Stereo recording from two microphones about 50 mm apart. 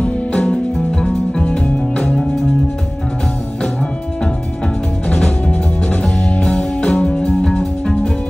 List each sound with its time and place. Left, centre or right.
0.0 s music: centre
5.1 s music: left